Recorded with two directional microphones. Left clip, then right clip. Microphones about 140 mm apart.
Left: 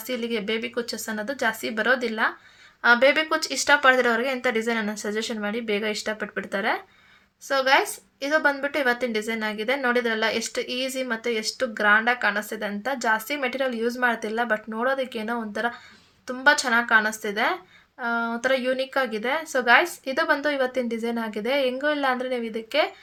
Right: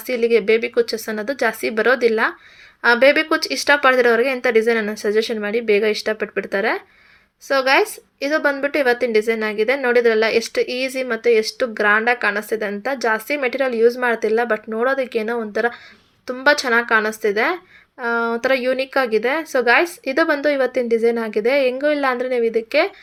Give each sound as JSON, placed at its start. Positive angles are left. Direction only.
{"t": 0.1, "sound": "a woman's voice", "side_deg": -30}
{"t": 2.8, "sound": "a woman's voice", "side_deg": -20}